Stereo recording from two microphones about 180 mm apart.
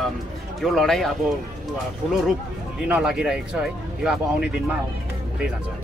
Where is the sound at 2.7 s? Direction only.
5° right (ahead or behind).